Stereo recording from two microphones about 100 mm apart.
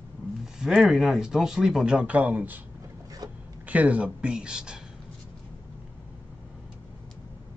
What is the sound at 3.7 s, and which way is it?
Speech, 15° right (ahead or behind).